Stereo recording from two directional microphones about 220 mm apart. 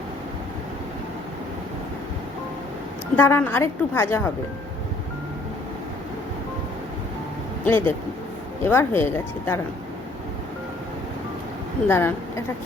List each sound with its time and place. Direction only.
3.2 s a woman's voice: 10° left (ahead or behind)
7.6 s a woman's voice: 10° left (ahead or behind)
11.9 s a woman's voice: 10° left (ahead or behind)